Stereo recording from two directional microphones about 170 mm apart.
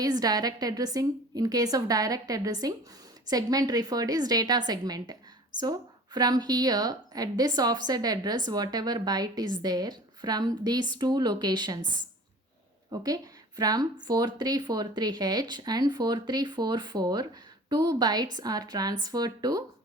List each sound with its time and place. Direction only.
0.0 s speech: 20° right (ahead or behind)
6.1 s speech: 25° right (ahead or behind)
12.9 s speech: 20° right (ahead or behind)